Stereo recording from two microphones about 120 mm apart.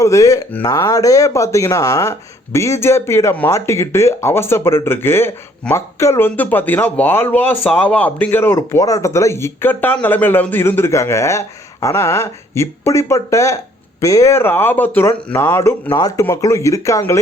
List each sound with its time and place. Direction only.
0.0 s speech: 25° left (ahead or behind)
16.0 s speech: 30° left (ahead or behind)